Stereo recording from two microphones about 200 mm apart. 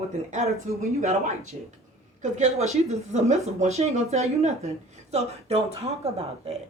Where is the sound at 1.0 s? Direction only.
35° right (ahead or behind).